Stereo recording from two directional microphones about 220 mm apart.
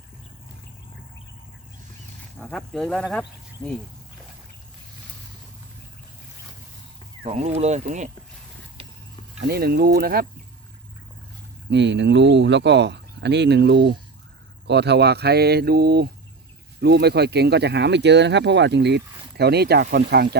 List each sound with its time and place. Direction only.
2.4 s speech: centre (ahead or behind)
7.3 s speech: 30° right (ahead or behind)
9.5 s speech: 45° right (ahead or behind)
11.7 s speech: 55° right (ahead or behind)